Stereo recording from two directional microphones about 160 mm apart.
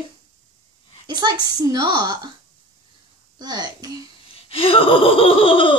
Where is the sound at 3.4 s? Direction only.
25° right (ahead or behind).